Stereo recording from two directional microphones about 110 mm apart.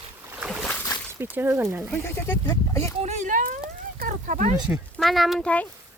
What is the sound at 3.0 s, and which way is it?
Speech, 90° right.